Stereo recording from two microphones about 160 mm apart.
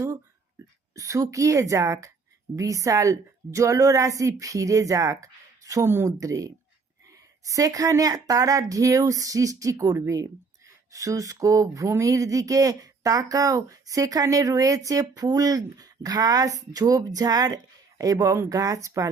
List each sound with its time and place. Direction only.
0.9 s speech: 20° right (ahead or behind)